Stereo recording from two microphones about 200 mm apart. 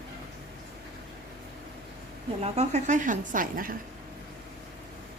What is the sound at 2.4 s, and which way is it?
A woman's voice, 35° right (ahead or behind).